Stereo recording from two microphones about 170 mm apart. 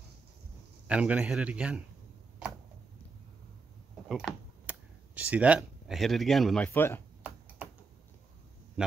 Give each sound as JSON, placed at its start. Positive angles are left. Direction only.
{"t": 0.8, "sound": "speech", "side_deg": -5}
{"t": 4.1, "sound": "speech", "side_deg": -5}
{"t": 8.8, "sound": "a sound", "side_deg": -5}